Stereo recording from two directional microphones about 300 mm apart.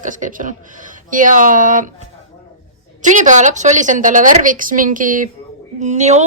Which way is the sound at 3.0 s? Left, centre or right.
Right.